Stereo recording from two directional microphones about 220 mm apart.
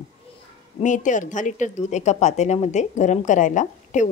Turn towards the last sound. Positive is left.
turn(degrees=35)  # may be behind; listen again after turning